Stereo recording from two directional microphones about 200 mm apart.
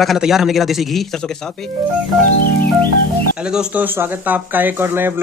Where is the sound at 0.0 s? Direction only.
Centre (ahead or behind).